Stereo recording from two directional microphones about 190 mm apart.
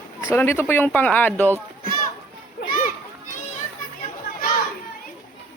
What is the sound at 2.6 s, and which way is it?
Children playing, 50° left (ahead or behind).